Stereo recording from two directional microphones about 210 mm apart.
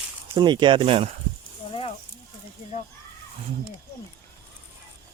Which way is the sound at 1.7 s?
25° left (ahead or behind).